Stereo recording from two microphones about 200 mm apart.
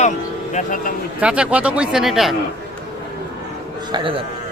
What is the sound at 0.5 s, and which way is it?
Speech, 40° left (ahead or behind).